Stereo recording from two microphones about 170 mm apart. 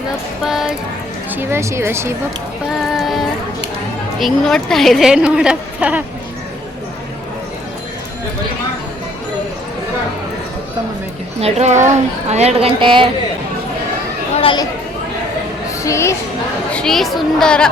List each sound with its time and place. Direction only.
0.4 s a woman's voice: centre (ahead or behind)
1.4 s speech: 15° right (ahead or behind)
2.7 s a sound: centre (ahead or behind)
4.2 s a woman's voice: centre (ahead or behind)
11.3 s a woman's voice: 40° right (ahead or behind)
14.3 s speech: 30° left (ahead or behind)
15.8 s speech: 15° left (ahead or behind)
16.7 s a woman's voice: centre (ahead or behind)